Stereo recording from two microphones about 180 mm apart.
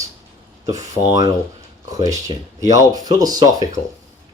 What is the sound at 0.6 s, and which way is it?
Speech, 20° right (ahead or behind).